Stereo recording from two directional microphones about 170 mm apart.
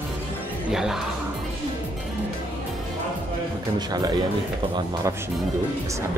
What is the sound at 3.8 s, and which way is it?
Speech, 25° right (ahead or behind).